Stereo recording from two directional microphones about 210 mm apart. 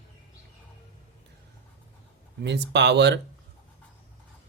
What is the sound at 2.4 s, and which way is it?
Speech, 55° right (ahead or behind).